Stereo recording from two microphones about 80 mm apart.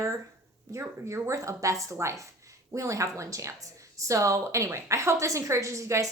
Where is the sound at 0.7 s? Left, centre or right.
Right.